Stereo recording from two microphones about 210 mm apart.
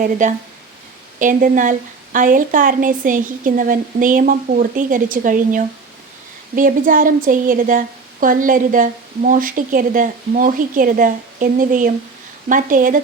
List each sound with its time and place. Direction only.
0.0 s a woman's voice: 35° right (ahead or behind)